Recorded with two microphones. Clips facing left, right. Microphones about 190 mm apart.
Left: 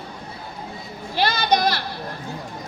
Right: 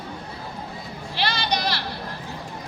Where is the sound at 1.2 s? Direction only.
45° left (ahead or behind).